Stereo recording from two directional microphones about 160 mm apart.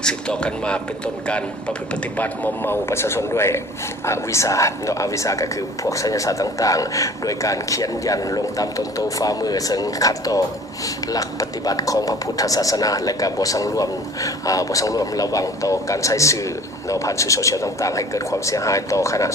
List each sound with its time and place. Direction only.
0.0 s speech: 5° left (ahead or behind)